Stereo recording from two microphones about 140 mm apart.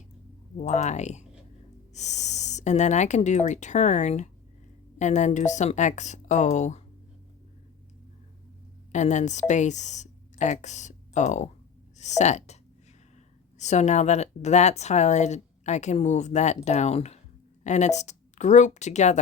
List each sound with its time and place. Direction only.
0.5 s a woman's voice: 55° left (ahead or behind)
8.9 s a woman's voice: 60° left (ahead or behind)
13.6 s a woman's voice: 55° left (ahead or behind)